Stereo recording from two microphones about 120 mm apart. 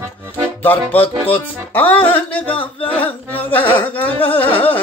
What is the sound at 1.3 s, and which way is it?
Speech, 15° left (ahead or behind).